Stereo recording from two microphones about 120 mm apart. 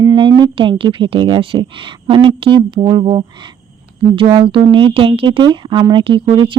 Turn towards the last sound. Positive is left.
turn(degrees=-45)  # may be behind; listen again after turning